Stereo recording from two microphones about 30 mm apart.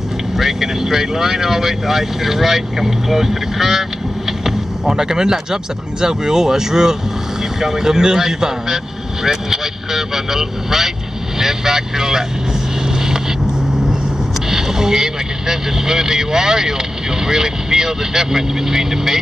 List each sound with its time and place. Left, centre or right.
0.4 s speech: centre
4.3 s vehicle: centre
4.9 s speech: right
14.5 s speech: centre